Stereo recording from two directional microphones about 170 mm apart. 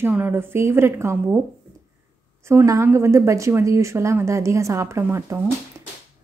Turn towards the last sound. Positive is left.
turn(degrees=-15)  # may be behind; listen again after turning